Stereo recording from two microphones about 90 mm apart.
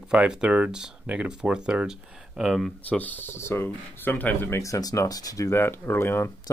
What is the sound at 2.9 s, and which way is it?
Speech, 15° left (ahead or behind).